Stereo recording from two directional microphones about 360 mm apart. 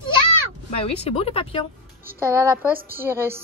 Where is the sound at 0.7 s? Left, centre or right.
Centre.